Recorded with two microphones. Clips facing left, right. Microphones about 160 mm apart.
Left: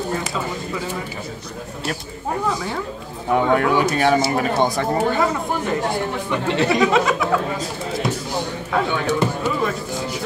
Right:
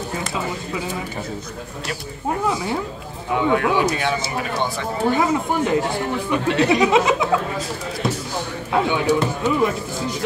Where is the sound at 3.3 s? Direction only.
45° left (ahead or behind).